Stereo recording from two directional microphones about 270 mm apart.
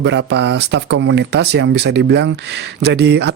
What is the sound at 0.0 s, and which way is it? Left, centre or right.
Speech, right.